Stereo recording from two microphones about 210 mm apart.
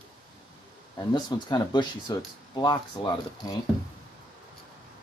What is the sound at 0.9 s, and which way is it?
Speech, 20° left (ahead or behind).